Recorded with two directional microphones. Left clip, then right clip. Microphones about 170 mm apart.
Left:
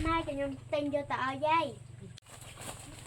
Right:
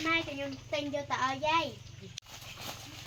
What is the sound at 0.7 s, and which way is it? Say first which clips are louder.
Speech: left 1 dB; 10° left (ahead or behind).